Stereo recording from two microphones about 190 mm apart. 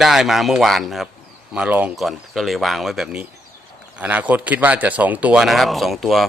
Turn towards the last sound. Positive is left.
turn(degrees=0)  # may be behind; listen again after turning